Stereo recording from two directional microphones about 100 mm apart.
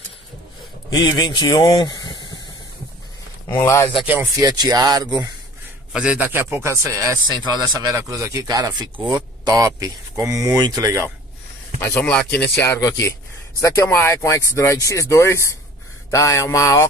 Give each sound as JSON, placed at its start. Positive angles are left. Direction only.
{"t": 0.9, "sound": "speech", "side_deg": 45}
{"t": 3.4, "sound": "speech", "side_deg": 25}
{"t": 4.4, "sound": "speech", "side_deg": -35}
{"t": 5.9, "sound": "a man's voice", "side_deg": -10}
{"t": 6.2, "sound": "speech", "side_deg": -20}
{"t": 7.2, "sound": "speech", "side_deg": -45}
{"t": 11.8, "sound": "speech", "side_deg": 25}
{"t": 12.1, "sound": "speech", "side_deg": 10}
{"t": 16.1, "sound": "mantra", "side_deg": 30}